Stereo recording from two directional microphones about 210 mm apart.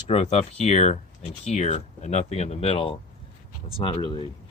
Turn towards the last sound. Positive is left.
turn(degrees=25)  # may be behind; listen again after turning